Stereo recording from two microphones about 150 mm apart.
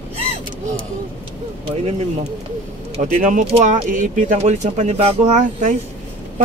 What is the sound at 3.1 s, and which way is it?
A man's voice, 65° right (ahead or behind).